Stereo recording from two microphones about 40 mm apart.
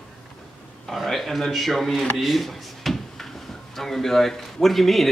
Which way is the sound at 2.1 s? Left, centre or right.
Centre.